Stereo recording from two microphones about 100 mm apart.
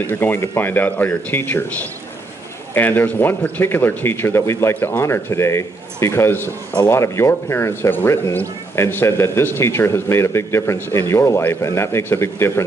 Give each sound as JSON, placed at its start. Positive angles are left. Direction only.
{"t": 0.1, "sound": "speech", "side_deg": 20}